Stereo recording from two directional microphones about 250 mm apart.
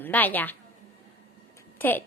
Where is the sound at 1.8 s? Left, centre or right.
Centre.